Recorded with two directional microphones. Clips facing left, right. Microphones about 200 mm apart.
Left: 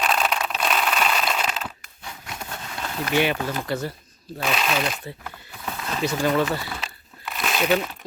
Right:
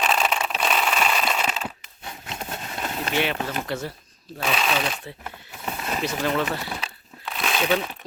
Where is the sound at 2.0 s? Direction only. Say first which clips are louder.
Right 2 dB; 25° right (ahead or behind).